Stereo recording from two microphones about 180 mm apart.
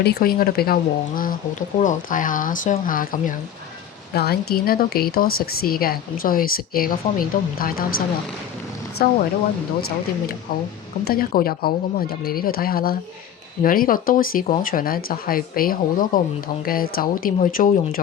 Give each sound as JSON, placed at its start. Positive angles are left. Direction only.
{"t": 0.0, "sound": "speech", "side_deg": 60}
{"t": 4.1, "sound": "speech", "side_deg": 60}
{"t": 11.0, "sound": "speech", "side_deg": 55}